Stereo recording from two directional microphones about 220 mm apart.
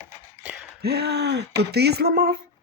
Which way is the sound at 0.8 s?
50° right (ahead or behind).